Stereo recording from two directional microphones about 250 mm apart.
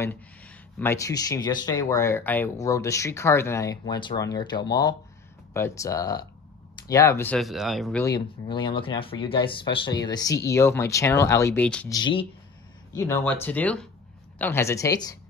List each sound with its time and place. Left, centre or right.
0.7 s speech: centre
8.0 s speech: centre
12.0 s speech: centre